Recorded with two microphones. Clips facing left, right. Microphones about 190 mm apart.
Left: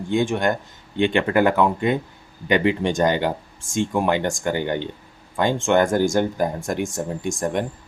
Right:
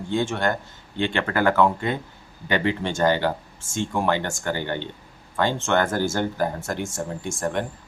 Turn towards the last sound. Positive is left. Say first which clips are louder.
# left 3 dB
turn(degrees=15)  # may be behind; listen again after turning